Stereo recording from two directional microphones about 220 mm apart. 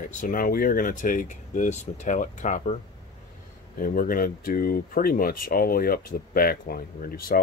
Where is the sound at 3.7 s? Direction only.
40° left (ahead or behind).